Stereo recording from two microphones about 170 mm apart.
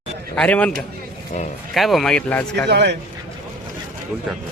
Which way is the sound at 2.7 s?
90° right.